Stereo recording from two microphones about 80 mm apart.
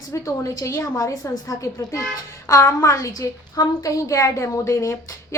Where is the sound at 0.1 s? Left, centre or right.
Left.